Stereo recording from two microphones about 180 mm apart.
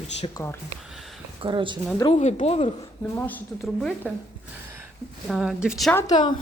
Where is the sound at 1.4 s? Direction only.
30° right (ahead or behind).